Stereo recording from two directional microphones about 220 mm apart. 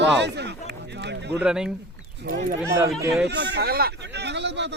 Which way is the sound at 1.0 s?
50° right (ahead or behind).